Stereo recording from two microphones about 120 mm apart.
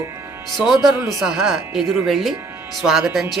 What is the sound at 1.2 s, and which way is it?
Speech, 5° right (ahead or behind).